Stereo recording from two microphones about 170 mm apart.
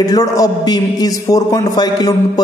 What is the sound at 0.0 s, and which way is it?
A man's voice, 20° left (ahead or behind).